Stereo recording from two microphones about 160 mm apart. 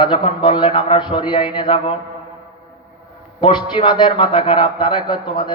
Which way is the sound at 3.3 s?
30° left (ahead or behind).